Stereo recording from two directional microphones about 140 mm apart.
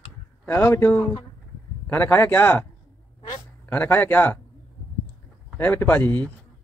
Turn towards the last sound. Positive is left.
turn(degrees=10)  # may be behind; listen again after turning